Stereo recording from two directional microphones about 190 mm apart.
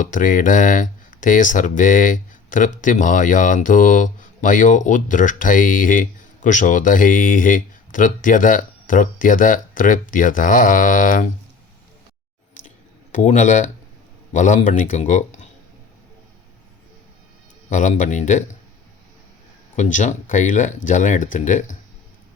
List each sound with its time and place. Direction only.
0.0 s speech: 45° left (ahead or behind)
12.6 s a sound: 40° left (ahead or behind)
14.3 s speech: 40° left (ahead or behind)
17.7 s speech: 40° left (ahead or behind)
19.7 s speech: 40° left (ahead or behind)